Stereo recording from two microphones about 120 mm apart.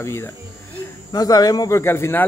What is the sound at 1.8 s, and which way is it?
Speech, 20° left (ahead or behind).